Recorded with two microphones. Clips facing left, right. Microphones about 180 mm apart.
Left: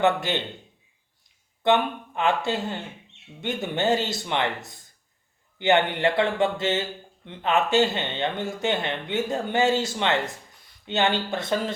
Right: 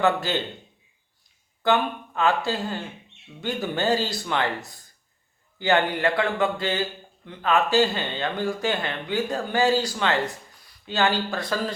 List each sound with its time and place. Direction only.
0.0 s speech: 20° left (ahead or behind)
1.6 s speech: 20° left (ahead or behind)
5.5 s speech: 25° left (ahead or behind)